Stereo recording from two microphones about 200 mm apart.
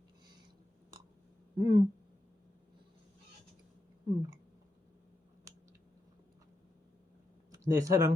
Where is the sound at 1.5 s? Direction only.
20° right (ahead or behind).